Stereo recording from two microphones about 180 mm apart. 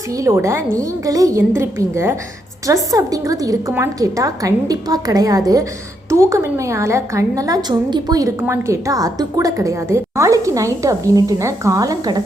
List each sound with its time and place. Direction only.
0.2 s a woman's voice: 15° right (ahead or behind)